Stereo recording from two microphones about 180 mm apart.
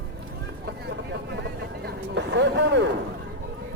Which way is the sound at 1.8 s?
75° right (ahead or behind).